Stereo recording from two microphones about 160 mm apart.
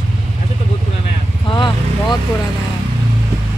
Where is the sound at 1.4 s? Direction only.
30° left (ahead or behind).